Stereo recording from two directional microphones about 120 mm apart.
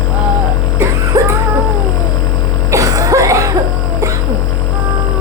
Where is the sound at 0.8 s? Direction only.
25° right (ahead or behind).